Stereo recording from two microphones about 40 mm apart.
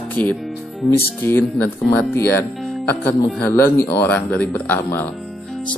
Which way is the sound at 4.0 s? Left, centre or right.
Left.